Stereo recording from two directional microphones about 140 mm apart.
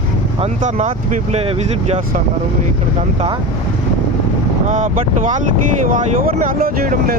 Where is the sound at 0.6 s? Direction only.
60° right (ahead or behind).